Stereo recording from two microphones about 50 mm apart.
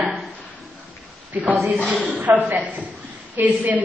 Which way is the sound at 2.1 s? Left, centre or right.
Right.